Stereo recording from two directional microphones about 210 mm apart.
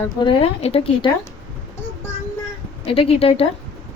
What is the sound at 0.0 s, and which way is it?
Speech, 20° left (ahead or behind).